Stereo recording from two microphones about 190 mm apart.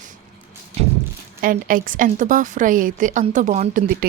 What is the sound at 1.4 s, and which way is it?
Speech, 45° right (ahead or behind).